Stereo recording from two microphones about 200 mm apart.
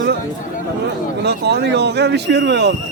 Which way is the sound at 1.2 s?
55° right (ahead or behind).